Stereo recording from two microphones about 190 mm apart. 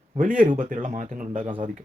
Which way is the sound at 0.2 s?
45° right (ahead or behind).